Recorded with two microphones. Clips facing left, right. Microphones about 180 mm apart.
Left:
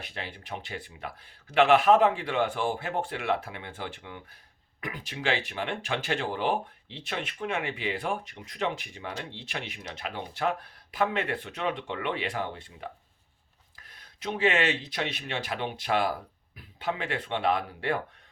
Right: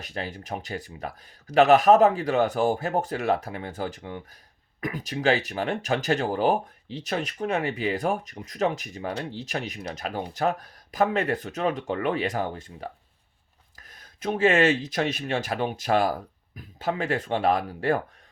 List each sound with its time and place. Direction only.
0.0 s speech: 40° right (ahead or behind)